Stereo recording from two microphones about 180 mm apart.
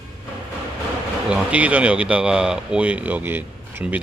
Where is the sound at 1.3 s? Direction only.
10° right (ahead or behind).